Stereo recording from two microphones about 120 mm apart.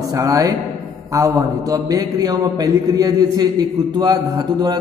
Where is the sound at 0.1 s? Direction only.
30° right (ahead or behind).